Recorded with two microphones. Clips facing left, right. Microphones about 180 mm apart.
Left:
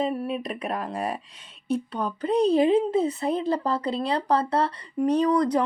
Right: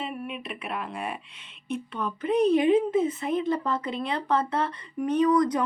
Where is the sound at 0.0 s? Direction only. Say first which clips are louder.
Left 7 dB; 35° left (ahead or behind).